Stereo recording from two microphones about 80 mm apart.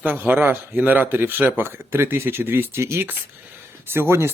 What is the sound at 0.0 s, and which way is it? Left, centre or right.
Speech, right.